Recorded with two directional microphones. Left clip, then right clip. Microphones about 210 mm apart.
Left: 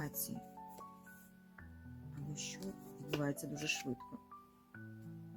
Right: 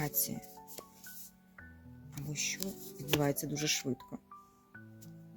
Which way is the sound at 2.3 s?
40° right (ahead or behind).